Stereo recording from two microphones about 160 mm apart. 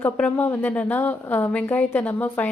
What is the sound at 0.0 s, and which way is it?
A woman's voice, 10° left (ahead or behind).